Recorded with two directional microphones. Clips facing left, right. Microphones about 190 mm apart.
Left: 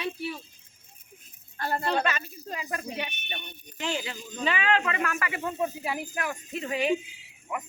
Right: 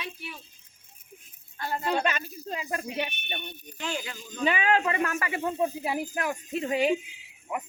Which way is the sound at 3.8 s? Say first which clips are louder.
Left 2 dB; 20° left (ahead or behind).